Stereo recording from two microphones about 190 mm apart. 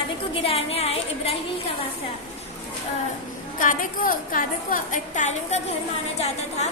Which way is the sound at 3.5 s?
45° left (ahead or behind).